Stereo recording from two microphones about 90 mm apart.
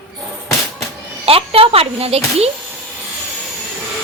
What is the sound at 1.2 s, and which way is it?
Speech, 90° right.